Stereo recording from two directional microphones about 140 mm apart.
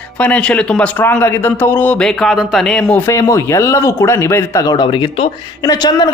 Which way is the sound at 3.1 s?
20° left (ahead or behind).